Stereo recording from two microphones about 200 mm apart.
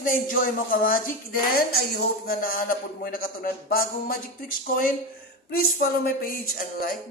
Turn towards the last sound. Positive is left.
turn(degrees=45)  # may be behind; listen again after turning